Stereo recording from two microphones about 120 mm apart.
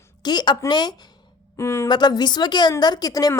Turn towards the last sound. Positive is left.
turn(degrees=30)  # may be behind; listen again after turning